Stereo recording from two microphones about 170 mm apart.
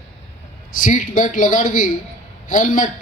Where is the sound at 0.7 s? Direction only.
50° left (ahead or behind).